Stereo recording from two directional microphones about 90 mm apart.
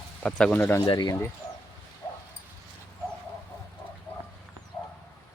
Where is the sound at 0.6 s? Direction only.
25° left (ahead or behind).